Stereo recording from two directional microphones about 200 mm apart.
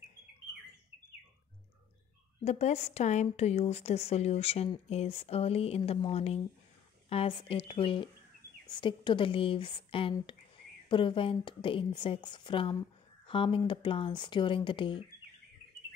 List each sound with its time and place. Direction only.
2.4 s a woman's voice: 35° left (ahead or behind)